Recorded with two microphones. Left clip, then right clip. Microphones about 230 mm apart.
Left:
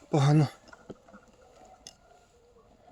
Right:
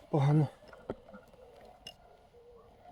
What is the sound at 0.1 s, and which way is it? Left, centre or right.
Speech, left.